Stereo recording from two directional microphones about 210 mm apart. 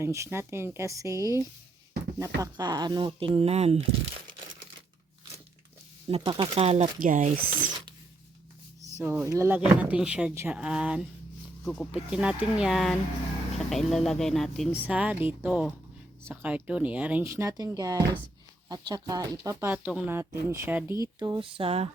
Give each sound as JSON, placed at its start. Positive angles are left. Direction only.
{"t": 0.0, "sound": "speech", "side_deg": -15}
{"t": 6.1, "sound": "speech", "side_deg": -25}
{"t": 9.0, "sound": "speech", "side_deg": -5}